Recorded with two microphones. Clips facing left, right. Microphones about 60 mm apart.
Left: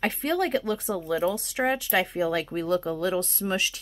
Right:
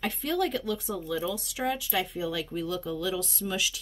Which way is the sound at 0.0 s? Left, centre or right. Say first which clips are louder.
Left 3 dB; left.